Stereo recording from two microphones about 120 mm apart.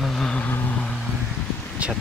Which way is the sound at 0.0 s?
5° left (ahead or behind).